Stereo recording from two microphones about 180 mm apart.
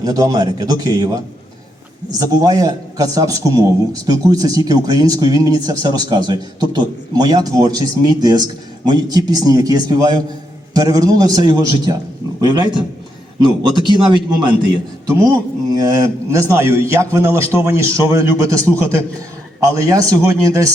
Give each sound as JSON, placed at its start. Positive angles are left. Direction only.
{"t": 0.0, "sound": "a man's voice", "side_deg": -20}
{"t": 19.5, "sound": "speech", "side_deg": -20}